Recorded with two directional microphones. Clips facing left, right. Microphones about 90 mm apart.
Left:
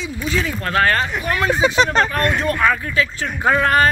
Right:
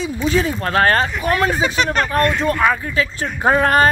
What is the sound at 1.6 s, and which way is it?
Speech, 25° left (ahead or behind).